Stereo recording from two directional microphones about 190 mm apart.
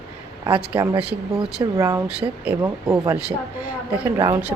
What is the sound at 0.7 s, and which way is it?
Speech, 10° right (ahead or behind).